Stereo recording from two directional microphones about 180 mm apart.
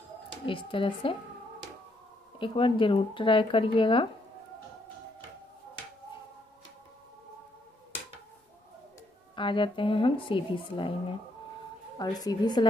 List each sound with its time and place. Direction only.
0.5 s speech: 30° left (ahead or behind)
2.3 s speech: 30° left (ahead or behind)
9.3 s speech: 25° left (ahead or behind)
12.0 s speech: 20° left (ahead or behind)